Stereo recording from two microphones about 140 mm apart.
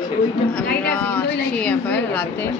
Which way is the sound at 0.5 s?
10° left (ahead or behind).